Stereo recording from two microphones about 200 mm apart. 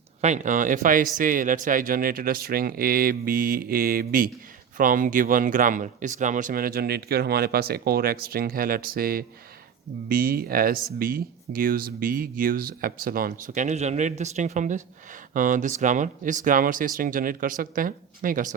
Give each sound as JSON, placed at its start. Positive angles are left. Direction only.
{"t": 0.2, "sound": "speech", "side_deg": -35}